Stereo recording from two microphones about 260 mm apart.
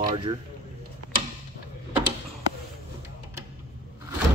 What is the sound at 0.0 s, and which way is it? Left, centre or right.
Speech, right.